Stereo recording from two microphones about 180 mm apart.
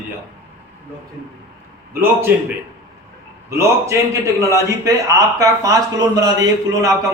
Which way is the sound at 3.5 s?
15° right (ahead or behind).